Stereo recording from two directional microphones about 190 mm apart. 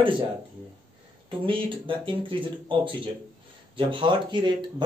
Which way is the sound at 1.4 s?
25° right (ahead or behind).